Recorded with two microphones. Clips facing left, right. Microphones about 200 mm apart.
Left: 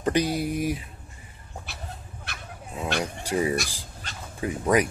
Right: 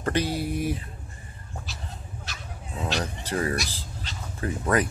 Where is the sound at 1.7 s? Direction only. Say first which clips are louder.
Even; 60° left (ahead or behind).